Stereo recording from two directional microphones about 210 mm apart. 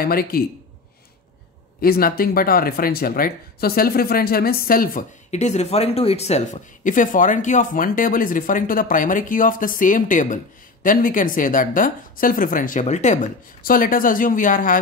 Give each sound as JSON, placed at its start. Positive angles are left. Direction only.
{"t": 0.0, "sound": "speech", "side_deg": 45}
{"t": 1.8, "sound": "speech", "side_deg": 45}